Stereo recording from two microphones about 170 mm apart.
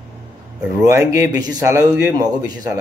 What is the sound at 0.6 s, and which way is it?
A man's voice, 10° right (ahead or behind).